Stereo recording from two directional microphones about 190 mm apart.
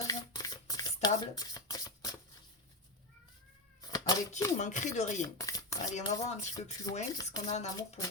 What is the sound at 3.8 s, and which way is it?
Cat, 20° left (ahead or behind).